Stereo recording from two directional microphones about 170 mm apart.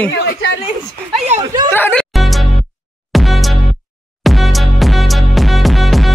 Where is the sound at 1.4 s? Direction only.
25° right (ahead or behind).